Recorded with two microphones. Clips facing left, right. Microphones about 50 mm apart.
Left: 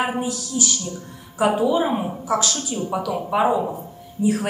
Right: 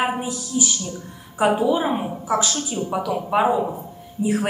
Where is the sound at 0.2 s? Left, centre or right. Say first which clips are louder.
Even; centre.